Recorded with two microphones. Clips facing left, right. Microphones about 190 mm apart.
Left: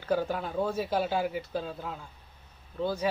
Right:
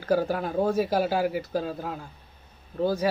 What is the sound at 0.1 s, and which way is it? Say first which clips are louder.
Speech: right 4 dB; 40° right (ahead or behind).